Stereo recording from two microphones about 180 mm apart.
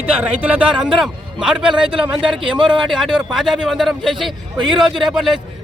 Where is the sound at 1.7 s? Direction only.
30° right (ahead or behind).